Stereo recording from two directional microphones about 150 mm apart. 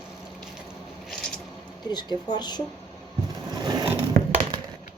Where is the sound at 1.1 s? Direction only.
5° left (ahead or behind).